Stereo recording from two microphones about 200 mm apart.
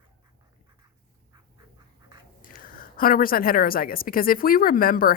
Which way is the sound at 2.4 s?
45° left (ahead or behind).